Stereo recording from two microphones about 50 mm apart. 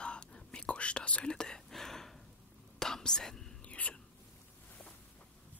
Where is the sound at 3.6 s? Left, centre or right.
Left.